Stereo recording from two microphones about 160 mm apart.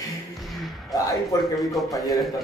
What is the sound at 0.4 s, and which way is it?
Basketball bounce, centre (ahead or behind).